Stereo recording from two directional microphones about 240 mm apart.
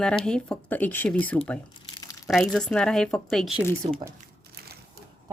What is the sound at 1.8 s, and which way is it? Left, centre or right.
Crumpling, centre.